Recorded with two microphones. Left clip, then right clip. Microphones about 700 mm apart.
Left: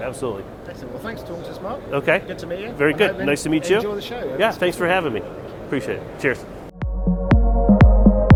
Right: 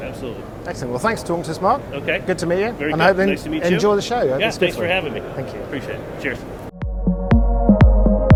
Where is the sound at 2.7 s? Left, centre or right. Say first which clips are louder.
Even; left.